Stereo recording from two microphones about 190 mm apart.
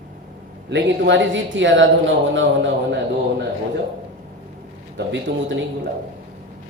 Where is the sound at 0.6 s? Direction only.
70° right (ahead or behind).